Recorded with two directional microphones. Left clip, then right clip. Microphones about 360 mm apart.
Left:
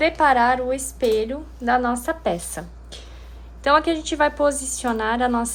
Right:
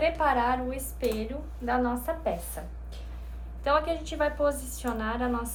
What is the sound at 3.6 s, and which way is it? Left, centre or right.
A woman's voice, centre.